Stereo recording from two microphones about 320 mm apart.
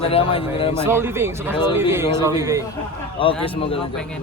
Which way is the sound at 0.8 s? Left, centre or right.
Centre.